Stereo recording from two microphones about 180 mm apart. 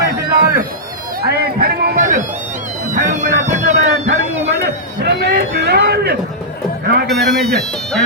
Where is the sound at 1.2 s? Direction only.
60° right (ahead or behind); by 3.9 s 40° right (ahead or behind).